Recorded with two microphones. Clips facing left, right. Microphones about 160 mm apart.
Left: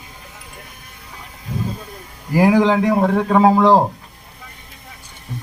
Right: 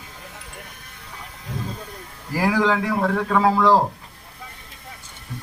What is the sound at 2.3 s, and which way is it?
Speech, 20° left (ahead or behind).